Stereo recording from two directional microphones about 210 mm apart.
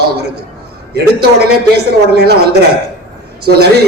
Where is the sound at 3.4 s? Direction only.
50° right (ahead or behind).